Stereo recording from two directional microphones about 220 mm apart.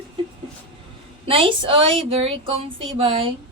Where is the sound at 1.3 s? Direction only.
25° right (ahead or behind).